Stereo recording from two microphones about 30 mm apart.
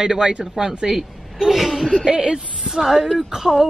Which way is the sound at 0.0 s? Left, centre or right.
Right.